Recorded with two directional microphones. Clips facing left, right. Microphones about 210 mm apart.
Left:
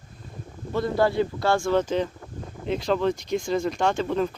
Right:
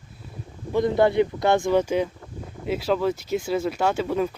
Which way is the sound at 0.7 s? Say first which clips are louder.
Right 3 dB; 20° right (ahead or behind).